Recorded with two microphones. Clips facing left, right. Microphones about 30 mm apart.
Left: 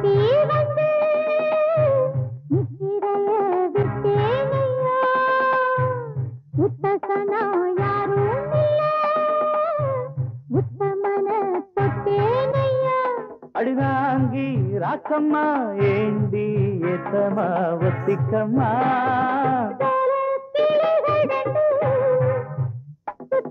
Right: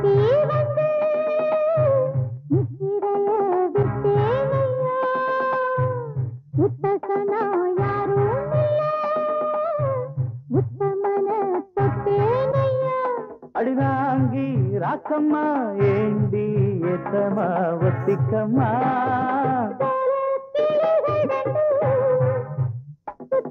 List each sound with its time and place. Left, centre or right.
0.0 s music of bollywood: left
10.5 s music: left
14.6 s a sound: left
15.7 s music: left
18.5 s music: centre
18.8 s music of bollywood: left
23.4 s music: left